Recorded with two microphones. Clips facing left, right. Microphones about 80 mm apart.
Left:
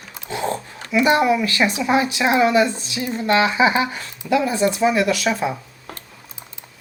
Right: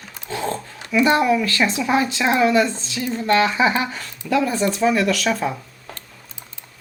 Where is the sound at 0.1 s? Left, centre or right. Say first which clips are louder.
Left 1 dB; centre.